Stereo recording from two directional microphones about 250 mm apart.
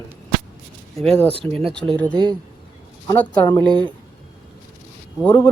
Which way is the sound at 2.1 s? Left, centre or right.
Centre.